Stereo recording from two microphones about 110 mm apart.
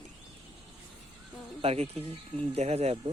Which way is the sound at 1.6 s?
70° right (ahead or behind).